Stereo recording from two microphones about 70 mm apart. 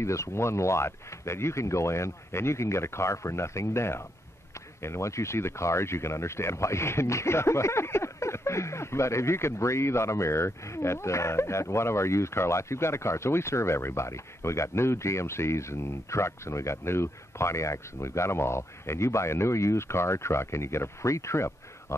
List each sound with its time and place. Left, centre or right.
0.0 s speech: left